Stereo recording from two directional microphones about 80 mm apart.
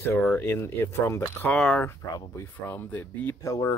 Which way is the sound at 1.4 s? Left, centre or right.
Centre.